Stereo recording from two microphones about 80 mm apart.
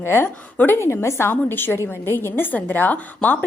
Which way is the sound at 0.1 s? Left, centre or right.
Left.